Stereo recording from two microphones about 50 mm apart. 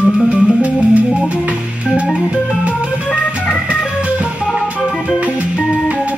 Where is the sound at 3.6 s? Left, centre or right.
Right.